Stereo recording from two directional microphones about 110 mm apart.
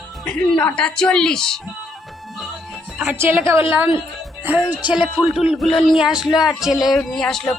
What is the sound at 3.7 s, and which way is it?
A woman's voice, 15° right (ahead or behind).